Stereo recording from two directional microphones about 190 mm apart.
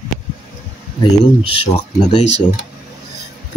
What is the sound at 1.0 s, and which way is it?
Speech, 30° left (ahead or behind).